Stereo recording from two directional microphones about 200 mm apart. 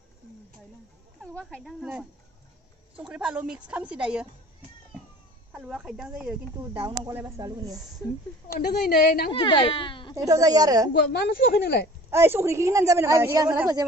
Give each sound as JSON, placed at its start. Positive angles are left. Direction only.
{"t": 1.3, "sound": "speech", "side_deg": 0}
{"t": 5.5, "sound": "a woman's voice", "side_deg": -5}
{"t": 8.5, "sound": "a woman's voice", "side_deg": 50}
{"t": 9.3, "sound": "speech", "side_deg": 25}
{"t": 10.1, "sound": "a woman's voice", "side_deg": -15}
{"t": 10.9, "sound": "a woman's voice", "side_deg": 60}
{"t": 12.1, "sound": "a woman's voice", "side_deg": -10}